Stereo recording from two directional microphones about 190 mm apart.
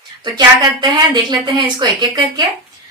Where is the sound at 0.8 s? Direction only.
20° right (ahead or behind).